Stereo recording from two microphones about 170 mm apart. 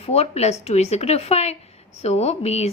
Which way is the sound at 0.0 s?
40° left (ahead or behind).